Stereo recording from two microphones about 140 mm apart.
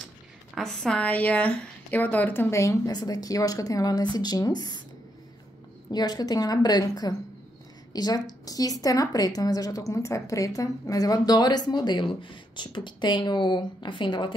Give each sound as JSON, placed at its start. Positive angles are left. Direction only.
{"t": 0.6, "sound": "a woman's voice", "side_deg": 5}
{"t": 5.9, "sound": "a woman's voice", "side_deg": 30}